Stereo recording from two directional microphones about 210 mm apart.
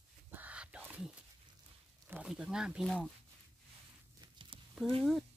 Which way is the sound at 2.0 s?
5° right (ahead or behind).